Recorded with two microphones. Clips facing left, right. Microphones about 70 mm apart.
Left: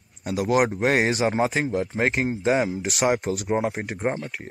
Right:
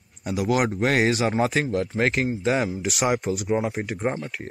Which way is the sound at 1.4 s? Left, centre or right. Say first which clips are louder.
Even; centre.